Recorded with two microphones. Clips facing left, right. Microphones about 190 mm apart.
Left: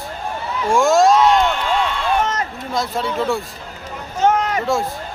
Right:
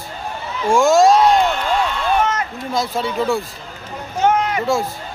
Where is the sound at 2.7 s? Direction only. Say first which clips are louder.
Right 1 dB; centre (ahead or behind).